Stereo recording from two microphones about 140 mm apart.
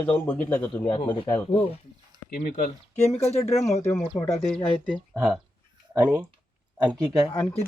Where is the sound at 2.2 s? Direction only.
85° left.